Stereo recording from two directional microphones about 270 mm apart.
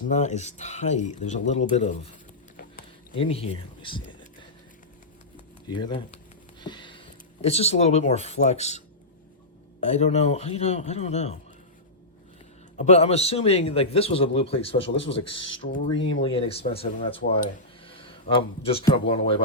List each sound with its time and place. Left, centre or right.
0.1 s a man's voice: left
3.2 s a man's voice: left
5.7 s speech: centre
6.6 s a sound: centre
7.4 s a man's voice: left
9.9 s a man's voice: left
12.8 s a man's voice: left